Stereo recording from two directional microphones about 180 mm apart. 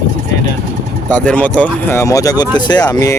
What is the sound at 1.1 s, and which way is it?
Speech, 10° left (ahead or behind).